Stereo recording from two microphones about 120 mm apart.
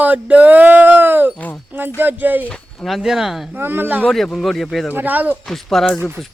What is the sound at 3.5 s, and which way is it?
Speech, 15° right (ahead or behind).